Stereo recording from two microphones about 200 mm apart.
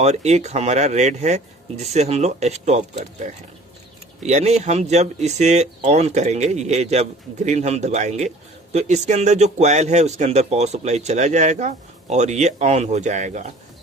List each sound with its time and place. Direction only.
0.0 s speech: 35° right (ahead or behind)
4.2 s speech: 35° right (ahead or behind)